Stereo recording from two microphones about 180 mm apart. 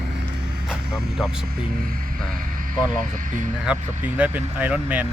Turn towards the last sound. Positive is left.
turn(degrees=-10)  # may be behind; listen again after turning